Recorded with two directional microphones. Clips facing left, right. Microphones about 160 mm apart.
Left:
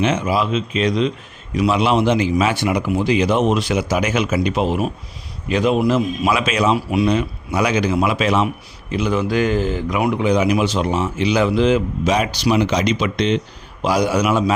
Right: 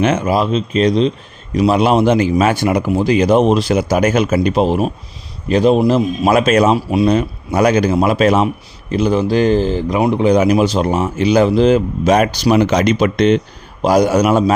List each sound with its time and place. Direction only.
0.0 s a man's voice: 45° right (ahead or behind); by 10.3 s 30° right (ahead or behind)
10.3 s a man's voice: 40° right (ahead or behind)